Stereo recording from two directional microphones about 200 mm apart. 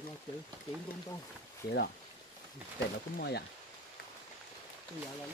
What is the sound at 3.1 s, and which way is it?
Speech, 55° left (ahead or behind).